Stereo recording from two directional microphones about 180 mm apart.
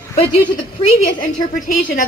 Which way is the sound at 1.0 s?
50° left (ahead or behind).